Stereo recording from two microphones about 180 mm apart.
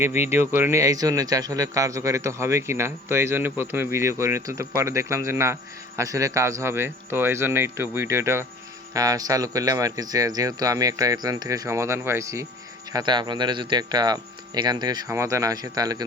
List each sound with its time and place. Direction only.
0.0 s speech: 15° right (ahead or behind)